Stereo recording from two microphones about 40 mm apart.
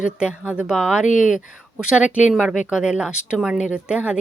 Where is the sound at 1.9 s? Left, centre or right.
Right; by 3.9 s centre.